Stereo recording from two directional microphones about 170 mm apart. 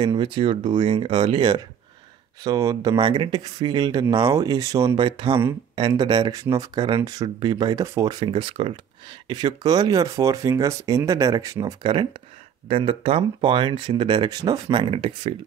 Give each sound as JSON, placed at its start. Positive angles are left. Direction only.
{"t": 0.0, "sound": "speech", "side_deg": -25}